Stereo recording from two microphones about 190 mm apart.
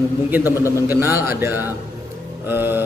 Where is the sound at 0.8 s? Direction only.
10° right (ahead or behind).